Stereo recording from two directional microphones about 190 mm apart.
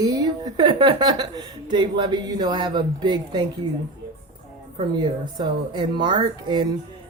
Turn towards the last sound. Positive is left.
turn(degrees=-25)  # may be behind; listen again after turning